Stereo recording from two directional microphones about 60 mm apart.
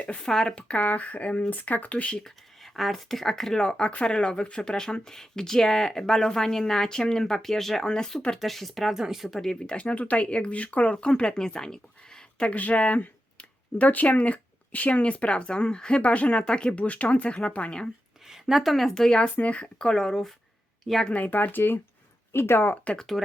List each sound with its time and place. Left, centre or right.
0.2 s speech: centre
2.2 s speech: centre
9.4 s speech: centre
18.3 s speech: centre
21.1 s speech: left
22.7 s speech: left